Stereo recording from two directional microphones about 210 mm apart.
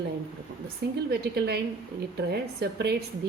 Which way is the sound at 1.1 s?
50° right (ahead or behind).